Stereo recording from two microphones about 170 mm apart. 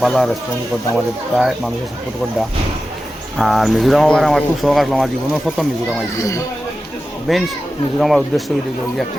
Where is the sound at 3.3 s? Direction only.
Centre (ahead or behind).